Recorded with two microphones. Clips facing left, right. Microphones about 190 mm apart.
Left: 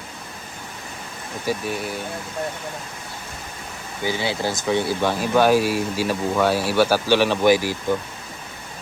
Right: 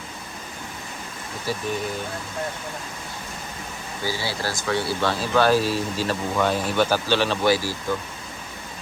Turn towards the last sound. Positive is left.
turn(degrees=15)  # may be behind; listen again after turning